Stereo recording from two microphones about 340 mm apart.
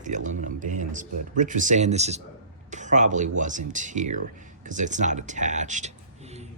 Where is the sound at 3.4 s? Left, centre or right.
Right.